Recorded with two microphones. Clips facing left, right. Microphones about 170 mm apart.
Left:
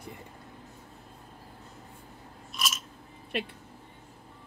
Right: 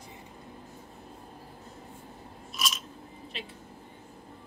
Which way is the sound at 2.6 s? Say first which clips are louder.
Even; 5° right (ahead or behind).